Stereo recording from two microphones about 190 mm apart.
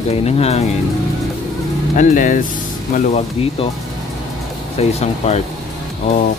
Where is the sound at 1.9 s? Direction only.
45° left (ahead or behind).